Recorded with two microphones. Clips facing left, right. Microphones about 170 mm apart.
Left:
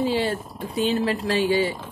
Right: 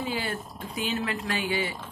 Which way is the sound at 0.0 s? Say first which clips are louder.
Left 8 dB; 30° left (ahead or behind).